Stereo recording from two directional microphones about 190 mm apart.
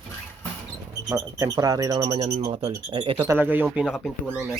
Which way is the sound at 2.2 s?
35° right (ahead or behind).